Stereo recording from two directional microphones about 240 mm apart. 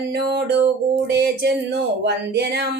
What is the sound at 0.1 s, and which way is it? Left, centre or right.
Speech, right.